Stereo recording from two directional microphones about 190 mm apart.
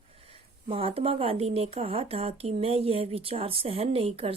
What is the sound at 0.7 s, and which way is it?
Speech, 30° right (ahead or behind).